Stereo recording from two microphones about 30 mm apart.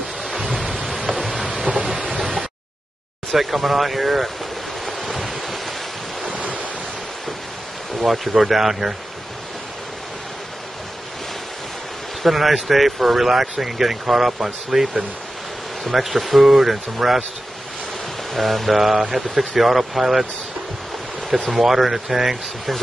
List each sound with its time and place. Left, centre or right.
0.2 s a sound: centre
1.6 s rain: centre
3.3 s speech: centre
4.8 s waves: centre
5.3 s ocean: centre
6.3 s waves: right
8.0 s speech: centre
12.2 s speech: centre
18.3 s speech: centre
21.5 s speech: centre